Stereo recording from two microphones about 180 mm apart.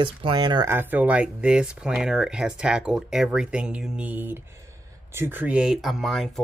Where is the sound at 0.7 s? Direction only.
10° right (ahead or behind).